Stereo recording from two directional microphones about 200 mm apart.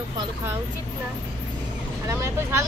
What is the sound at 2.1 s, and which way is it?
Speech, 15° right (ahead or behind).